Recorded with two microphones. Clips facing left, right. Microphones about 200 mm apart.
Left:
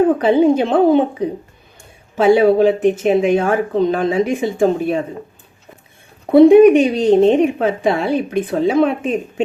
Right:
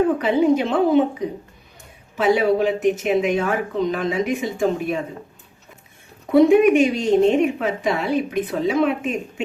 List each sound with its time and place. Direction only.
0.2 s a woman's voice: 30° left (ahead or behind)
2.1 s a woman's voice: 30° left (ahead or behind)
6.2 s a woman's voice: 30° left (ahead or behind)